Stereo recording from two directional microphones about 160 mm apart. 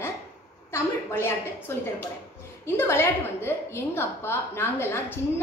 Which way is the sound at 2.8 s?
15° left (ahead or behind).